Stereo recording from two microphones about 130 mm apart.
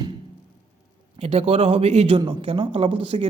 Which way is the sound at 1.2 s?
55° right (ahead or behind).